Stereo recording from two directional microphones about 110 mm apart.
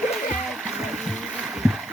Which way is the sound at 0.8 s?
Centre (ahead or behind).